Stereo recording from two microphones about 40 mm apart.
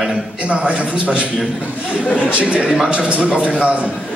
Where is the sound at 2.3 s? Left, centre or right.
Right.